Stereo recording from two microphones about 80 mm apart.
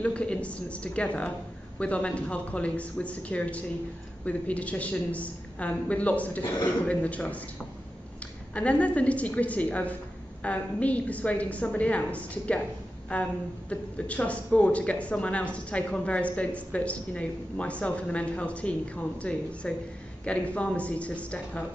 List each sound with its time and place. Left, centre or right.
0.0 s speech: centre
8.5 s speech: centre